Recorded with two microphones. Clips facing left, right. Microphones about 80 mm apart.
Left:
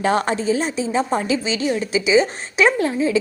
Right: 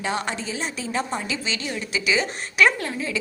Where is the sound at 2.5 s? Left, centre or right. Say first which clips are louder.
Left 4 dB; left.